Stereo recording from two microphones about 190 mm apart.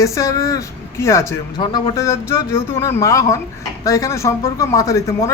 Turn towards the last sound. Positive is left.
turn(degrees=15)  # may be behind; listen again after turning